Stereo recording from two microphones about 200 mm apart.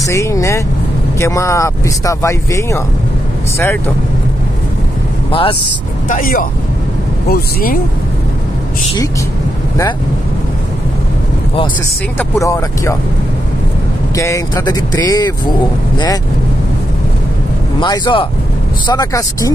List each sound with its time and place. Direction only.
0.0 s speech: 15° left (ahead or behind)
5.3 s speech: 25° left (ahead or behind)
6.0 s speech: 40° left (ahead or behind)
12.2 s speech: 15° left (ahead or behind)
14.1 s speech: 15° left (ahead or behind)
17.7 s speech: 20° left (ahead or behind)